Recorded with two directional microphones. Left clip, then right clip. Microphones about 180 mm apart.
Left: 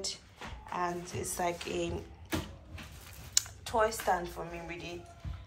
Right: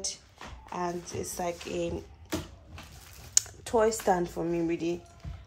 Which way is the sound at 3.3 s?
60° right (ahead or behind).